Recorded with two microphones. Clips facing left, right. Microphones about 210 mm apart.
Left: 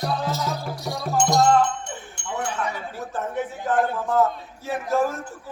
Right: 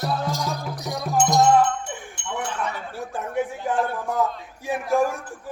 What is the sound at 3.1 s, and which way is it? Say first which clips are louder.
A man's voice: right 2 dB; 10° right (ahead or behind).